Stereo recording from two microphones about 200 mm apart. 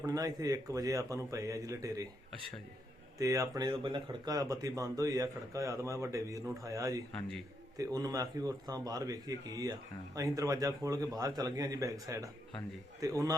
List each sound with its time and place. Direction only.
0.0 s speech: 20° right (ahead or behind)
3.2 s speech: 15° right (ahead or behind)
7.1 s a man's voice: centre (ahead or behind)
7.8 s speech: 15° right (ahead or behind)